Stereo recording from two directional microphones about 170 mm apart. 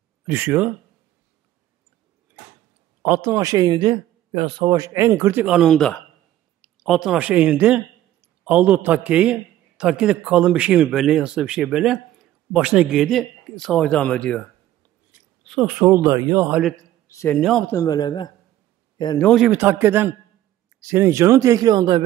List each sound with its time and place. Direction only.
0.3 s a man's voice: 15° right (ahead or behind)
3.0 s a man's voice: 15° right (ahead or behind); by 14.4 s 5° left (ahead or behind)
15.6 s a man's voice: 10° right (ahead or behind)
16.4 s a man's voice: 5° right (ahead or behind)
17.1 s a man's voice: 15° left (ahead or behind)
17.4 s a man's voice: 5° left (ahead or behind)
17.7 s a man's voice: 25° left (ahead or behind)
19.2 s a man's voice: centre (ahead or behind)
19.5 s a man's voice: 10° right (ahead or behind)